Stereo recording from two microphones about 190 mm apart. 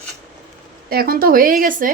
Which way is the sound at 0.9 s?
50° right (ahead or behind).